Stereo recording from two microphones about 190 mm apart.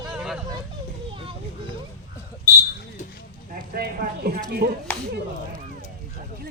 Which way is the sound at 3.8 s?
55° right (ahead or behind).